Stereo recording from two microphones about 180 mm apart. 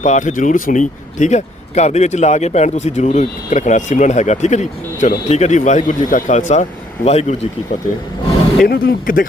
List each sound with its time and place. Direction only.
0.0 s speech: 40° left (ahead or behind)
8.6 s speech: 55° left (ahead or behind)